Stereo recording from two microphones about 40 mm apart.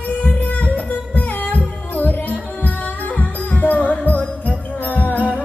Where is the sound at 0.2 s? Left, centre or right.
Left.